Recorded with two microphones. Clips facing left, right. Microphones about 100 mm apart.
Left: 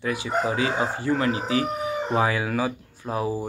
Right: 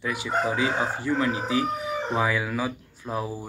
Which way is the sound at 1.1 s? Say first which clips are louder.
Left 2 dB; 35° left (ahead or behind).